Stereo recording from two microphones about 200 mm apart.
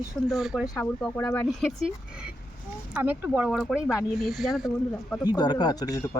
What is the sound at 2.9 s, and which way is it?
Speech, 10° right (ahead or behind).